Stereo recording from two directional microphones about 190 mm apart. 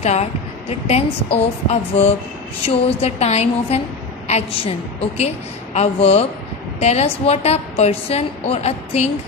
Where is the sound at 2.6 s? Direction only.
30° left (ahead or behind).